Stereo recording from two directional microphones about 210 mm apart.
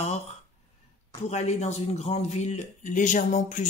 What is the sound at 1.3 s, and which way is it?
Speech, 30° left (ahead or behind).